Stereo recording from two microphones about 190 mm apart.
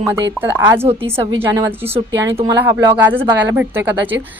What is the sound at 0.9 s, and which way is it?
Speech, 30° right (ahead or behind).